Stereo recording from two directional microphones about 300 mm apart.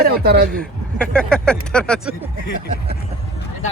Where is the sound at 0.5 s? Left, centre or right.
Centre.